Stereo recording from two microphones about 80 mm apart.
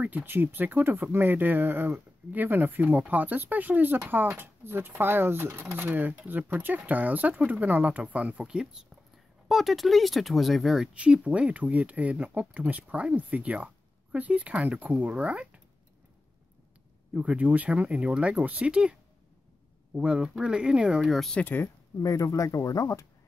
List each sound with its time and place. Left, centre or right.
0.0 s speech: right
9.5 s speech: centre
11.0 s speech: centre
17.1 s speech: centre
21.0 s speech: centre
21.4 s speech: left
22.0 s speech: left